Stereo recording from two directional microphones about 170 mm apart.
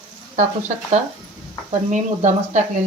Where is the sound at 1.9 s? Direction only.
45° right (ahead or behind).